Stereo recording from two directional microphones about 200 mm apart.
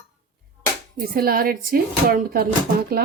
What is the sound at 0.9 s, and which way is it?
Speech, 45° right (ahead or behind).